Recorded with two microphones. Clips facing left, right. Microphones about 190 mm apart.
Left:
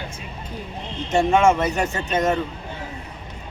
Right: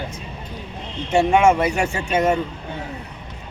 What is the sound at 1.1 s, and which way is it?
Speech, 10° right (ahead or behind).